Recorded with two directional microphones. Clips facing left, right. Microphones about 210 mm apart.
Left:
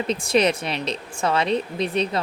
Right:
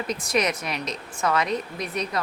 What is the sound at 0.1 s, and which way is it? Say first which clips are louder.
A woman's voice: left 5 dB; 30° left (ahead or behind).